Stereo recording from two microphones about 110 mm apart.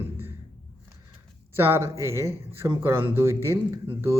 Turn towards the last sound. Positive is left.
turn(degrees=-25)  # may be behind; listen again after turning